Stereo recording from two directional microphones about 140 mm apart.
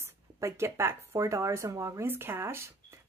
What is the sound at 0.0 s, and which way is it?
Speech, 20° right (ahead or behind).